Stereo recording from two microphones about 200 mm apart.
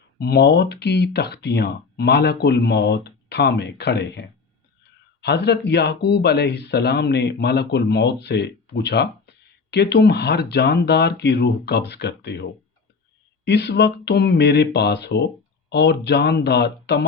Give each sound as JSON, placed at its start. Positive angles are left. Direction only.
{"t": 0.2, "sound": "speech", "side_deg": 55}